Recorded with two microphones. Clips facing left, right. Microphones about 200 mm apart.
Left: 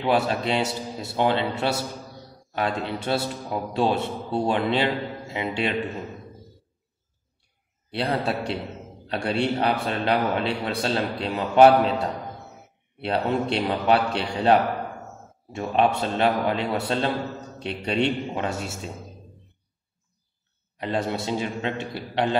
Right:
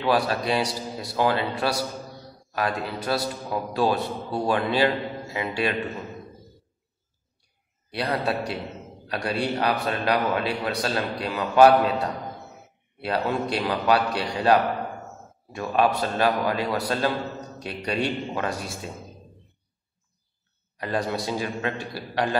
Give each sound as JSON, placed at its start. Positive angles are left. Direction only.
{"t": 0.0, "sound": "a man's voice", "side_deg": 25}
{"t": 7.9, "sound": "a man's voice", "side_deg": 25}
{"t": 13.0, "sound": "a man's voice", "side_deg": 25}
{"t": 20.7, "sound": "a man's voice", "side_deg": 25}